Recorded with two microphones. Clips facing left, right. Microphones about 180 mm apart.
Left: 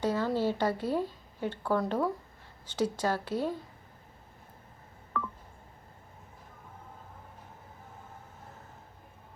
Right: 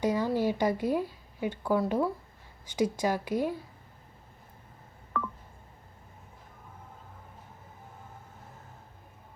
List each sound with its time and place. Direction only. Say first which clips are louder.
0.0 s a woman's voice: right 1 dB; 10° right (ahead or behind)